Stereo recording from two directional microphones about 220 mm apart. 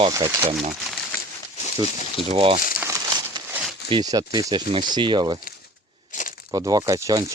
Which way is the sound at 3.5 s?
Centre (ahead or behind).